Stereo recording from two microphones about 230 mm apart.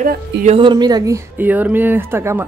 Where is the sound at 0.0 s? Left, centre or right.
Right.